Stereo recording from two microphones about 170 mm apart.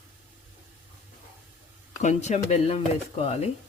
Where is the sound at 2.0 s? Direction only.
45° left (ahead or behind).